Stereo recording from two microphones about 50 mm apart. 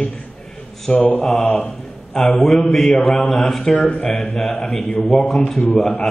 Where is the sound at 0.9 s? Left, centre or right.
Left.